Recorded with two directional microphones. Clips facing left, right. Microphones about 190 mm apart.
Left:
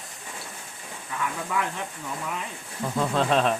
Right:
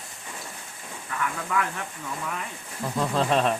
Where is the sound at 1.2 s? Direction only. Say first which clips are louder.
Right 1 dB; 20° left (ahead or behind).